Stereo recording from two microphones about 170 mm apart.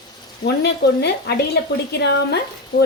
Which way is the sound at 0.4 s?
70° left (ahead or behind).